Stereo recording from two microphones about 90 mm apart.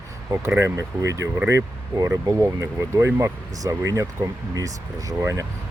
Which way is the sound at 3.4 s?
40° right (ahead or behind).